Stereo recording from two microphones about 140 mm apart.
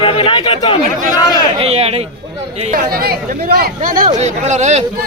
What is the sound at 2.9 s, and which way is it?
Speech, 90° right.